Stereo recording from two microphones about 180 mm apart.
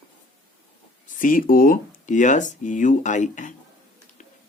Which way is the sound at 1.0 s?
50° left (ahead or behind).